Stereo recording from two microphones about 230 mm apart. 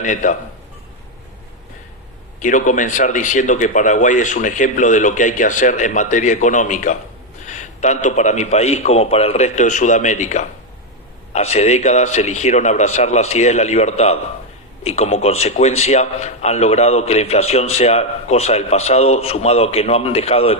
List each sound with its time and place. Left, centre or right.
0.0 s speech: left
2.4 s a man's voice: left